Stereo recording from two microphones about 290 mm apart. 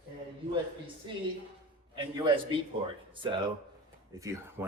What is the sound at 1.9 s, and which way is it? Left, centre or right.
Speech, centre.